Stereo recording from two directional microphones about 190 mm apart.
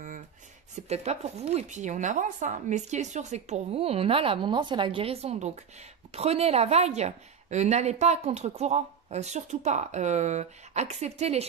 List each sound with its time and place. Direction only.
0.7 s a woman's voice: 35° right (ahead or behind)